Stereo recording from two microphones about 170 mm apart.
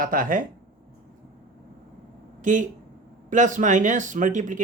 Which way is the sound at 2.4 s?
45° right (ahead or behind).